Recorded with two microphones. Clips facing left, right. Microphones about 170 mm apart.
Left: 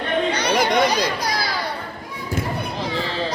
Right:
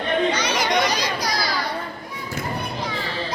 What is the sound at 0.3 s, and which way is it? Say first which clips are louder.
Children playing: left 3 dB; 60° left (ahead or behind).